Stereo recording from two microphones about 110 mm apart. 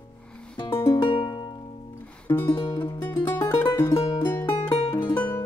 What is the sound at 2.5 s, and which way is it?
Music, 50° left (ahead or behind).